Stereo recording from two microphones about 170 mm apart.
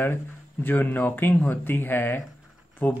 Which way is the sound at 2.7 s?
10° left (ahead or behind).